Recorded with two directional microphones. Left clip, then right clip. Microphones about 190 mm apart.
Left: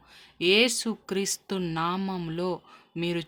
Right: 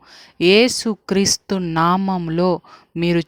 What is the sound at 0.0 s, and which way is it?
Speech, 50° right (ahead or behind).